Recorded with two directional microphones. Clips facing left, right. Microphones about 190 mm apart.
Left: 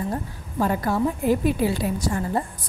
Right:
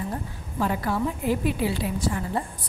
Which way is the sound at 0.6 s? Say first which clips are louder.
Left 3 dB; 45° left (ahead or behind).